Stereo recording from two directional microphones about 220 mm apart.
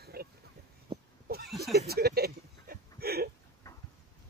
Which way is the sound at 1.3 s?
45° right (ahead or behind).